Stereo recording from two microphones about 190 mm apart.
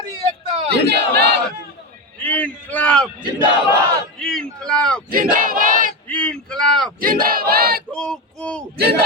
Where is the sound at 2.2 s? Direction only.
10° left (ahead or behind).